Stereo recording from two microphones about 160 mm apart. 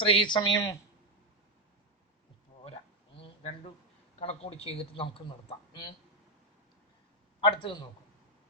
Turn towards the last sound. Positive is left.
turn(degrees=30)  # may be behind; listen again after turning